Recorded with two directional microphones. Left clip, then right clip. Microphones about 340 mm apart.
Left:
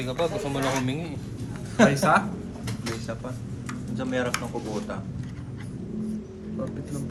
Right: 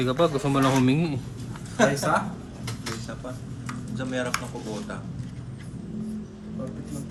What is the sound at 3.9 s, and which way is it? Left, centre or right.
Speech, centre.